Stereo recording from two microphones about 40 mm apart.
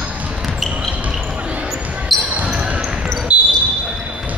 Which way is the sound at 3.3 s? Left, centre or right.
Right.